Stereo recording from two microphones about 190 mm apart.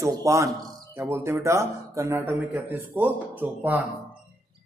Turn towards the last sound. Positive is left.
turn(degrees=-10)  # may be behind; listen again after turning